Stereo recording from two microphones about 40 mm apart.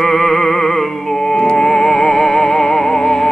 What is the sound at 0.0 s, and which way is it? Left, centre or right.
Music, centre.